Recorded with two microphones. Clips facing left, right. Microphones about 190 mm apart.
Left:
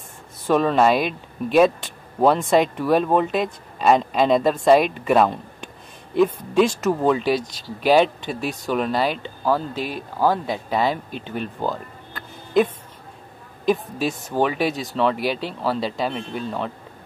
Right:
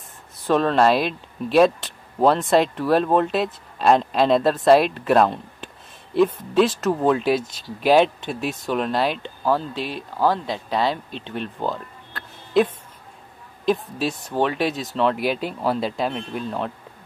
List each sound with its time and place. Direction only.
0.5 s speech: 5° left (ahead or behind)
9.8 s speech: 45° left (ahead or behind)
10.1 s speech: 10° left (ahead or behind)
13.7 s speech: centre (ahead or behind)